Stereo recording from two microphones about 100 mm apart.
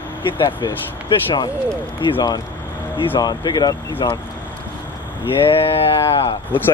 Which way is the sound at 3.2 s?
50° left (ahead or behind).